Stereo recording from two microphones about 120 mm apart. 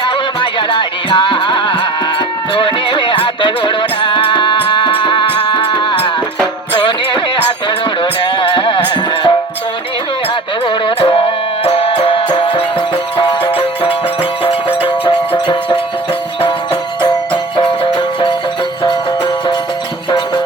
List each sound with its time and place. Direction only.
0.7 s music: 45° left (ahead or behind)
10.7 s music: 45° left (ahead or behind)
14.8 s music: 45° left (ahead or behind)
17.0 s music: 40° left (ahead or behind)
20.1 s music: 40° left (ahead or behind)